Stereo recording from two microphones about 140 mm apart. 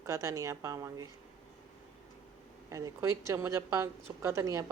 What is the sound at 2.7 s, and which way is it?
A woman's voice, 20° right (ahead or behind).